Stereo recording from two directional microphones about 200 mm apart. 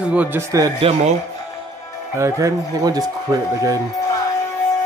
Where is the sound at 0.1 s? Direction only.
10° right (ahead or behind).